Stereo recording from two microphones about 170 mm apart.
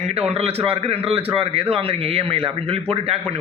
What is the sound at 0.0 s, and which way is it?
A man's voice, 40° right (ahead or behind).